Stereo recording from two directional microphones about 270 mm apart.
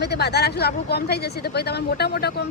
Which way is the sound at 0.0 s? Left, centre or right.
Left.